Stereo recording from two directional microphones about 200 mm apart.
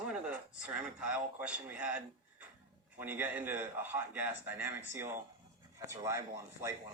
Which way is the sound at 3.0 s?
10° right (ahead or behind).